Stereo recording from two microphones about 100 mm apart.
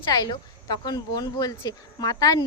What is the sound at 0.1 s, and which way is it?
Speech, 40° left (ahead or behind).